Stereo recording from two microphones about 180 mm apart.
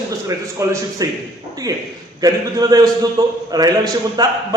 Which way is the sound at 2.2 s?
20° right (ahead or behind).